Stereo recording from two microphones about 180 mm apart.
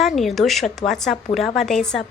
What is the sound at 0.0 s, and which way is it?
A woman's voice, centre (ahead or behind).